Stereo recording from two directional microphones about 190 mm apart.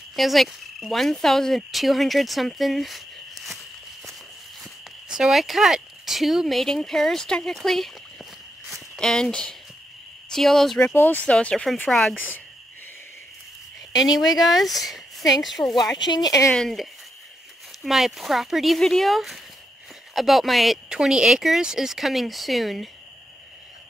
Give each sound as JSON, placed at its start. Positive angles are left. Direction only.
{"t": 0.1, "sound": "speech", "side_deg": 0}
{"t": 5.0, "sound": "speech", "side_deg": -5}
{"t": 14.0, "sound": "speech", "side_deg": 0}
{"t": 16.1, "sound": "speech", "side_deg": 20}
{"t": 16.5, "sound": "speech", "side_deg": 0}